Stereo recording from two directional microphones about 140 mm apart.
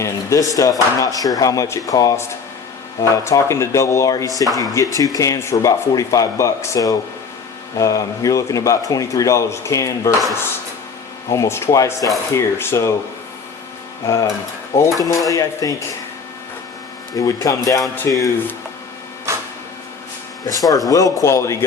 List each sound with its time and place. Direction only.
0.0 s a sound: 20° left (ahead or behind)
0.5 s speech: 25° left (ahead or behind)
11.3 s speech: 20° left (ahead or behind)
14.8 s speech: 25° left (ahead or behind)
17.2 s speech: 25° left (ahead or behind)
19.3 s printer: 20° right (ahead or behind)
20.5 s speech: 25° left (ahead or behind)